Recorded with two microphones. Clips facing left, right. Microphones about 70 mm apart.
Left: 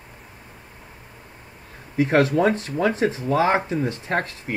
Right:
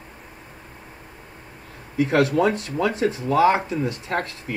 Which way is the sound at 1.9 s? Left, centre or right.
Left.